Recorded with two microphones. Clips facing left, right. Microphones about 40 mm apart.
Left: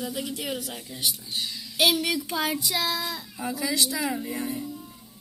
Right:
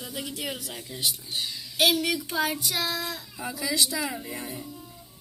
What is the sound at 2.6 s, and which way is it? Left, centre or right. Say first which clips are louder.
Speech: left 2 dB; centre.